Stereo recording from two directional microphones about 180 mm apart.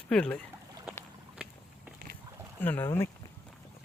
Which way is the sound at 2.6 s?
10° left (ahead or behind).